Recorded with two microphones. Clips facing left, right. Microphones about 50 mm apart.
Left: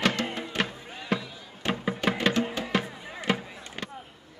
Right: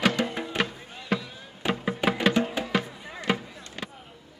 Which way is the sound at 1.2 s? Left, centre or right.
Centre.